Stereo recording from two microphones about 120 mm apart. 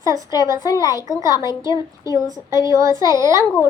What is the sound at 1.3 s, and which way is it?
Speech, 35° left (ahead or behind).